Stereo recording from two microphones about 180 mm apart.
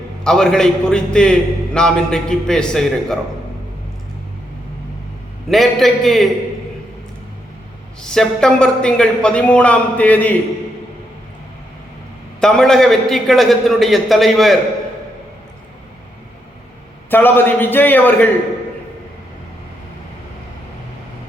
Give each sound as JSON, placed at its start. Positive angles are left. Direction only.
{"t": 0.3, "sound": "a man's voice", "side_deg": 5}
{"t": 5.5, "sound": "a man's voice", "side_deg": 0}
{"t": 8.0, "sound": "a man's voice", "side_deg": 5}
{"t": 12.4, "sound": "a man's voice", "side_deg": 5}
{"t": 17.1, "sound": "a man's voice", "side_deg": 10}